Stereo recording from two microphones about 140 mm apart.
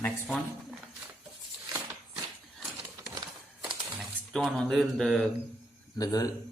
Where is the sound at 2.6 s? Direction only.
Centre (ahead or behind).